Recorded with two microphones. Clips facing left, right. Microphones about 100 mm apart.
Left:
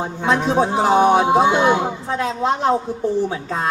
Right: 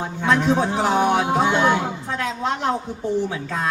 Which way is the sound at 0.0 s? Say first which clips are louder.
Left 1 dB; 20° left (ahead or behind).